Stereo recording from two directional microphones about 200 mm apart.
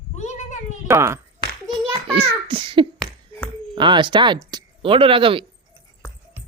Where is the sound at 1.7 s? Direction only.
25° right (ahead or behind).